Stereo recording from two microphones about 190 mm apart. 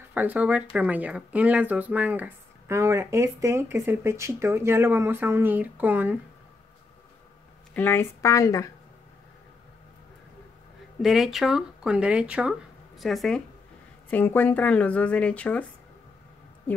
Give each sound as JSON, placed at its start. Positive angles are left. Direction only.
{"t": 0.1, "sound": "speech", "side_deg": -10}
{"t": 7.7, "sound": "speech", "side_deg": 10}
{"t": 11.0, "sound": "speech", "side_deg": 0}